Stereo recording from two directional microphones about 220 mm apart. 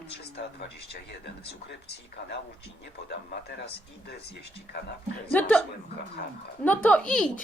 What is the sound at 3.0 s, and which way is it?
Speech, 50° left (ahead or behind).